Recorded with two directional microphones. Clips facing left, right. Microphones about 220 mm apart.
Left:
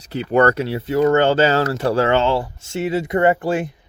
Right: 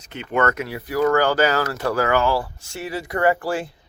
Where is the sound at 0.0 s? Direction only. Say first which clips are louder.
Left 6 dB; 35° left (ahead or behind).